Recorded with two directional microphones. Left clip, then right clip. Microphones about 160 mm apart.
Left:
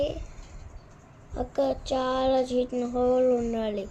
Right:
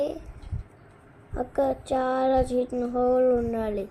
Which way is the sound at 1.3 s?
5° right (ahead or behind).